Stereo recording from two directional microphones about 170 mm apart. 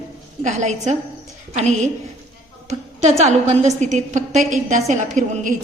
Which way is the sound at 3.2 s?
40° right (ahead or behind).